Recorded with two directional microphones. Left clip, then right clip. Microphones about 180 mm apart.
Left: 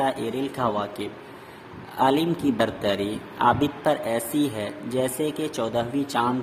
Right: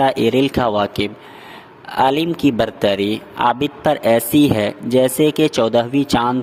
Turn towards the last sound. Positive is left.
turn(degrees=-50)  # may be behind; listen again after turning